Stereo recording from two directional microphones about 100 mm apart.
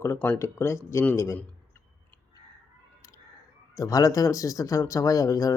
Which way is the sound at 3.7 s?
35° left (ahead or behind).